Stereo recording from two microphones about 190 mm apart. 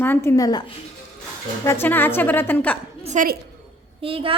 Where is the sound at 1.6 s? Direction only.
10° left (ahead or behind).